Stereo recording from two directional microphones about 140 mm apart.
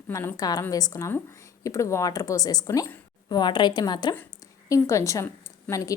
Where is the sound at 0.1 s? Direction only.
20° left (ahead or behind).